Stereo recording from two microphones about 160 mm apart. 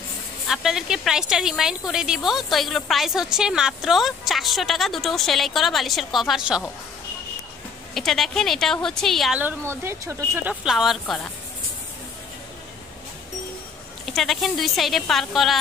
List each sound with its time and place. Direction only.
0.5 s speech: 5° right (ahead or behind)
7.9 s speech: centre (ahead or behind)
9.4 s speech: 15° right (ahead or behind)
10.5 s speech: centre (ahead or behind)
14.0 s speech: centre (ahead or behind)